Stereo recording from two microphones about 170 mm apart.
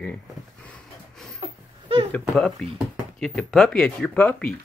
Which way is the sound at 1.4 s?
35° right (ahead or behind).